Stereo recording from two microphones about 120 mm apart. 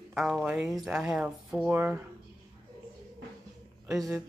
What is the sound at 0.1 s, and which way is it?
Speech, centre (ahead or behind).